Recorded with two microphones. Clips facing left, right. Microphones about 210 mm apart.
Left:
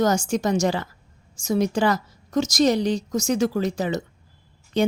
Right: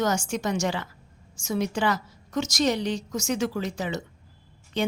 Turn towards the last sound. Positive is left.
turn(degrees=40)  # may be behind; listen again after turning